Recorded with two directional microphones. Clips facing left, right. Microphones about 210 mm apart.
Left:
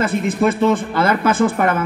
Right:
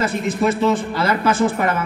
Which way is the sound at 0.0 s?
55° left (ahead or behind).